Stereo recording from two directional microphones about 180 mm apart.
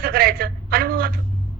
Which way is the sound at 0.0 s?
55° right (ahead or behind).